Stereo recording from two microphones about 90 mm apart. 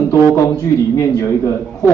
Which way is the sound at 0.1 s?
35° left (ahead or behind).